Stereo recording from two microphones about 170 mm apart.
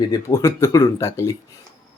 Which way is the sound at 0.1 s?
20° left (ahead or behind).